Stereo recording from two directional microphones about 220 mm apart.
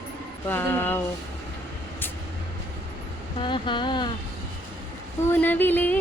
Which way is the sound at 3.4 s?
20° left (ahead or behind).